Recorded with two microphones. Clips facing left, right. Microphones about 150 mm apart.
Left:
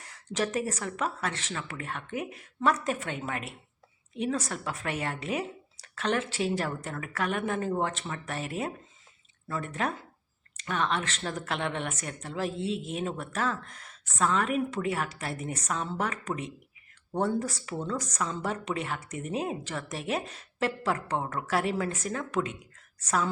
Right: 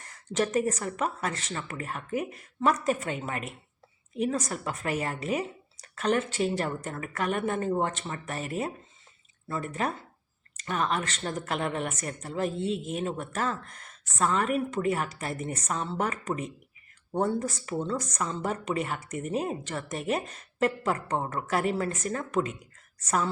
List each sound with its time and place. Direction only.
0.0 s a woman's voice: 5° left (ahead or behind)